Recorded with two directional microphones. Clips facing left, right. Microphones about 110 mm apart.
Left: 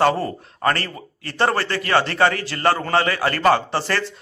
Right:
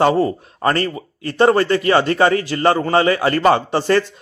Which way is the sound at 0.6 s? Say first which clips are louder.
Right 4 dB; 25° right (ahead or behind).